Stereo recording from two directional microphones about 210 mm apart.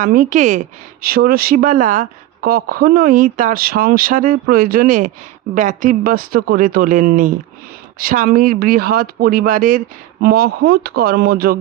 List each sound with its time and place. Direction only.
0.0 s a woman's voice: 40° right (ahead or behind)